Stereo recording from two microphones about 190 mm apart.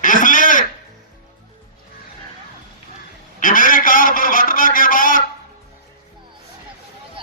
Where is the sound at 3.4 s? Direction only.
45° left (ahead or behind).